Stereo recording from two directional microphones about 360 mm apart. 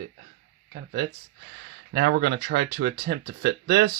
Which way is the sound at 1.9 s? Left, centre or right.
Right.